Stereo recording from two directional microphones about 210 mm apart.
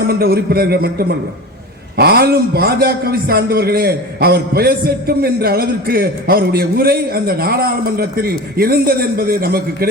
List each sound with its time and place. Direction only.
0.1 s a man's voice: 45° right (ahead or behind)